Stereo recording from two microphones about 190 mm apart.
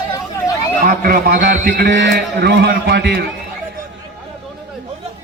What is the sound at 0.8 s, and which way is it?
A man's voice, 50° right (ahead or behind).